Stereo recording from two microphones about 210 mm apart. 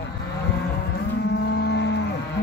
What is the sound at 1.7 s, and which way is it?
Livestock, 55° left (ahead or behind).